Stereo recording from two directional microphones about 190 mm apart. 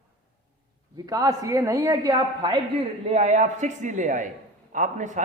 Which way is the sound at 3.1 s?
40° right (ahead or behind).